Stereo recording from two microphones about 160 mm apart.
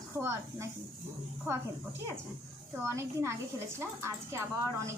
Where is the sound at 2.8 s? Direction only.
15° right (ahead or behind).